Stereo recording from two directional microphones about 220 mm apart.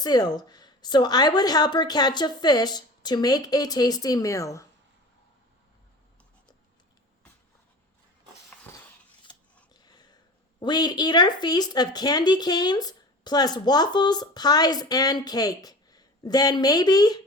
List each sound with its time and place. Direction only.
0.0 s speech: 20° left (ahead or behind)
9.7 s a sound: 20° left (ahead or behind)
10.6 s speech: 20° left (ahead or behind)